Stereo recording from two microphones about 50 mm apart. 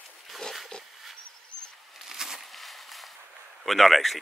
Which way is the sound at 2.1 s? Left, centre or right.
Centre.